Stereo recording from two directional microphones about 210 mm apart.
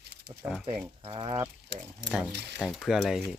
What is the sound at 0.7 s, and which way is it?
Speech, 25° right (ahead or behind).